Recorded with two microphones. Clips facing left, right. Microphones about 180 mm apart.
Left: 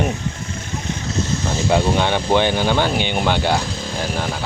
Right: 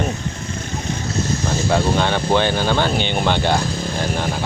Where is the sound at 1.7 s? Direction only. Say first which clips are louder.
Left 1 dB; 15° left (ahead or behind).